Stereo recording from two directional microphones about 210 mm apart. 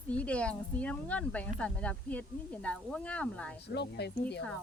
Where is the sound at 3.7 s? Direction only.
55° left (ahead or behind).